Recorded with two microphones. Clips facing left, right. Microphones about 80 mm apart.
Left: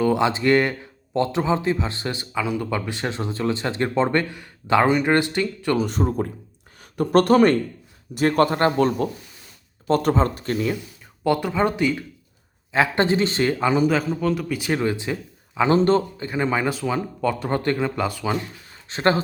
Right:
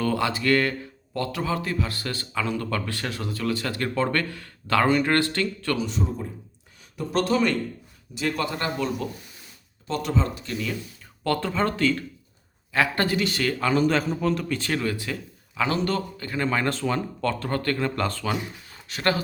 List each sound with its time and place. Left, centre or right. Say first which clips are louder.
0.0 s speech: left 5 dB; left
5.7 s speech: left 9 dB; left
11.2 s a man's voice: left 4 dB; centre
13.8 s a man's voice: left 2 dB; centre
18.9 s speech: left 5 dB; left